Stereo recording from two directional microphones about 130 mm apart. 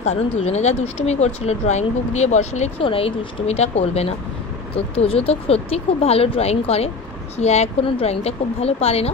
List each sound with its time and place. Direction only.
0.0 s speech: 60° left (ahead or behind)
2.8 s speech: 45° left (ahead or behind)